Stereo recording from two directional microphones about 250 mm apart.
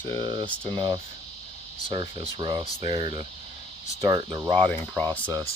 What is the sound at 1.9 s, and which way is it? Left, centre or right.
Speech, right.